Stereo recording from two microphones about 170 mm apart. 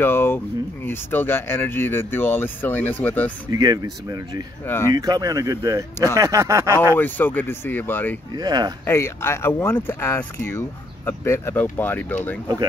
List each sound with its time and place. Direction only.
0.0 s a sound: 15° left (ahead or behind)
0.8 s speech: 10° left (ahead or behind)
3.5 s speech: 20° right (ahead or behind)
4.6 s speech: 15° left (ahead or behind)
4.9 s speech: 20° right (ahead or behind)
7.0 s speech: 10° left (ahead or behind)
8.4 s speech: 25° right (ahead or behind)
8.8 s speech: 15° left (ahead or behind)